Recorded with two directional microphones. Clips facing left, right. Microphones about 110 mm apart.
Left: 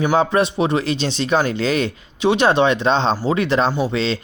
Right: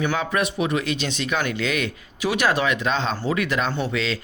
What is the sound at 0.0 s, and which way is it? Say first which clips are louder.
Speech: left 7 dB; 35° left (ahead or behind).